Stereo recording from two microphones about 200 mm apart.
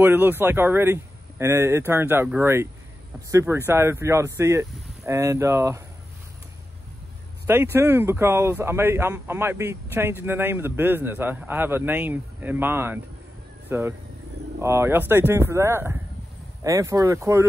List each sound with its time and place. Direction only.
0.0 s speech: 10° right (ahead or behind)
7.4 s speech: 10° right (ahead or behind)